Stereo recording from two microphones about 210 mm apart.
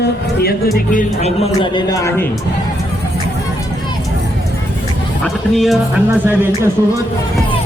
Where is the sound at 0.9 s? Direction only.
30° left (ahead or behind).